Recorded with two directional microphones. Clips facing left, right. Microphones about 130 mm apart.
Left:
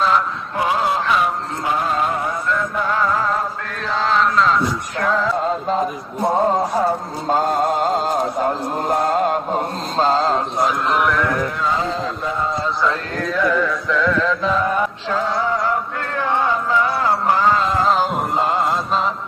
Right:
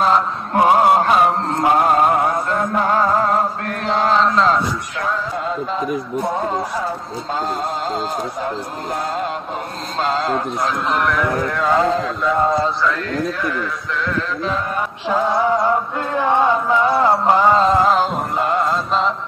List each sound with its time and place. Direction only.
0.6 s a sound: 50° right (ahead or behind)
1.6 s a sound: 65° right (ahead or behind)
2.9 s music: 40° right (ahead or behind)
4.1 s chant: 30° right (ahead or behind)
6.7 s speech: 45° left (ahead or behind)
9.9 s mantra: 35° left (ahead or behind)
10.9 s a man's voice: centre (ahead or behind)
11.7 s a man's voice: 70° right (ahead or behind)
15.0 s chant: 15° right (ahead or behind)
16.2 s a sound: 20° right (ahead or behind)
18.4 s mantra: 25° left (ahead or behind)